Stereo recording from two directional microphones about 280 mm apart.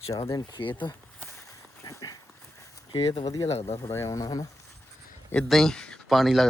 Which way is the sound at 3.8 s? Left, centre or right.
Centre.